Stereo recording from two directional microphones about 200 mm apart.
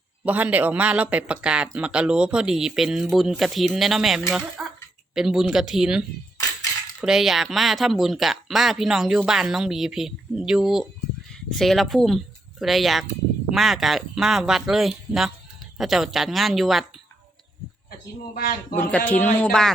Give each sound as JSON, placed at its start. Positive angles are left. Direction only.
{"t": 0.3, "sound": "speech", "side_deg": -10}
{"t": 18.3, "sound": "speech", "side_deg": 50}
{"t": 18.8, "sound": "speech", "side_deg": 5}